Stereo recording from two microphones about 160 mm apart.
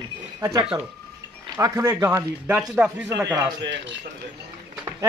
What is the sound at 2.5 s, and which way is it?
Speech, 5° right (ahead or behind).